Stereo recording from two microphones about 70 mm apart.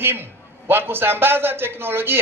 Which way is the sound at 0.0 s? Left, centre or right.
Right.